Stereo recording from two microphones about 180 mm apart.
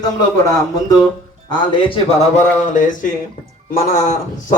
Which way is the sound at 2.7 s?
45° left (ahead or behind).